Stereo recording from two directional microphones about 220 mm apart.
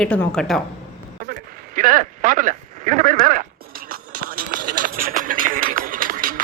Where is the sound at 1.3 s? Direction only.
40° right (ahead or behind).